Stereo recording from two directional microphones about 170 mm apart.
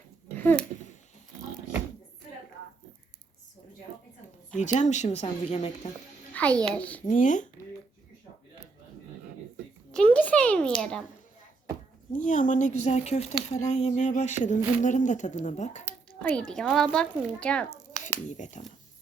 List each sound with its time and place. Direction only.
0.3 s a sound: 10° left (ahead or behind)
4.5 s speech: 45° left (ahead or behind)
6.3 s a child's voice: 10° left (ahead or behind)
7.1 s speech: 50° left (ahead or behind)
9.9 s a sound: 10° left (ahead or behind)
12.1 s speech: 50° left (ahead or behind)
16.0 s speech: 5° left (ahead or behind)
18.3 s speech: 45° left (ahead or behind)